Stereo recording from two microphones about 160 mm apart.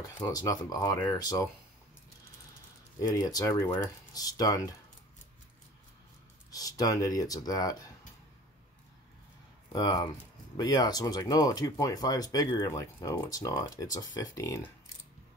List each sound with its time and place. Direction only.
0.0 s speech: 25° left (ahead or behind)
3.0 s speech: 20° left (ahead or behind)
6.5 s speech: 20° left (ahead or behind)
9.7 s speech: 25° left (ahead or behind)